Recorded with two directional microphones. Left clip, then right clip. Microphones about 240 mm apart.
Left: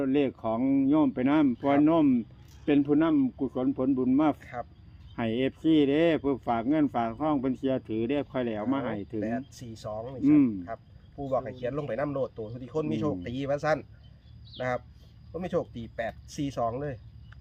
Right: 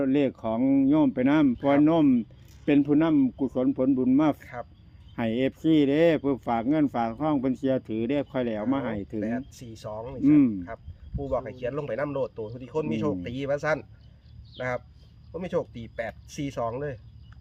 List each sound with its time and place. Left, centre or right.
0.0 s speech: right
15.3 s speech: right